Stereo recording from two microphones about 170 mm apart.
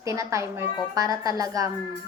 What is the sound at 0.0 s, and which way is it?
A woman's voice, 15° right (ahead or behind).